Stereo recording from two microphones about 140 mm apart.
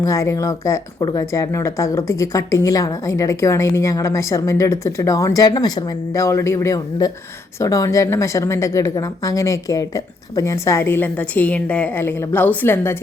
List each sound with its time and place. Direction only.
0.0 s speech: 20° left (ahead or behind)